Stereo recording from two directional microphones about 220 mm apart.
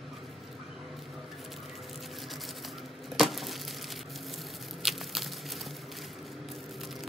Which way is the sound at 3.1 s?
Centre (ahead or behind).